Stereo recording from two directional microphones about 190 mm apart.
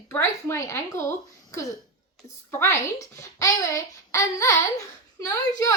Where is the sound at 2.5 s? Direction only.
15° left (ahead or behind).